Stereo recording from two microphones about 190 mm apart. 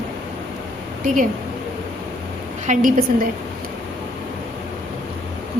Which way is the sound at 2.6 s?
45° right (ahead or behind).